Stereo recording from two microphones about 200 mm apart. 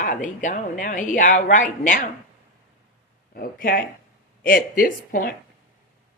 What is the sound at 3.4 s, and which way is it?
Speech, 45° left (ahead or behind).